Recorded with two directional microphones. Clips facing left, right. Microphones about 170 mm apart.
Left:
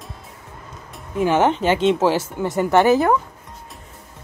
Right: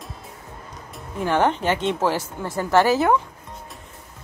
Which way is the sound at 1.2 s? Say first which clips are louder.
Left 3 dB; 20° left (ahead or behind).